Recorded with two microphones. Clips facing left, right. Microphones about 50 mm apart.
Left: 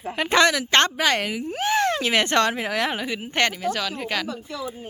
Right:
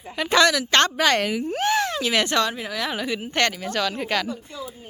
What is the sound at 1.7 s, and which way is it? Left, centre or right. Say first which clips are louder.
Speech: left 1 dB; left.